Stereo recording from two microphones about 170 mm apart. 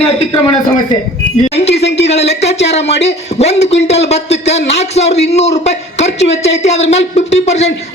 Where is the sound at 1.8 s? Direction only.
85° left.